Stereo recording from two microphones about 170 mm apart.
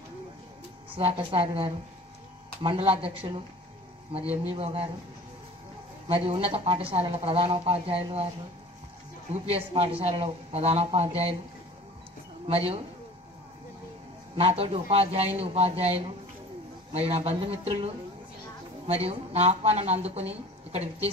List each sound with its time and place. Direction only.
0.8 s a woman's voice: 35° right (ahead or behind)
6.0 s a woman's voice: 35° right (ahead or behind)
9.3 s a woman's voice: 35° right (ahead or behind)
12.4 s a woman's voice: 35° right (ahead or behind)
14.3 s a woman's voice: 35° right (ahead or behind)